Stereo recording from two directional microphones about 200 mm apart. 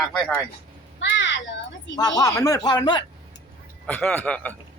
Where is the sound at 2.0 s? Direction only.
20° left (ahead or behind).